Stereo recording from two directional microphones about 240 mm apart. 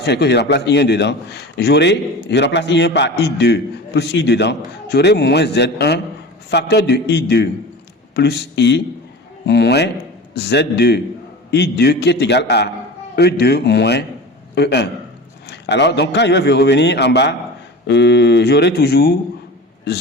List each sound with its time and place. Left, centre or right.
0.0 s a man's voice: left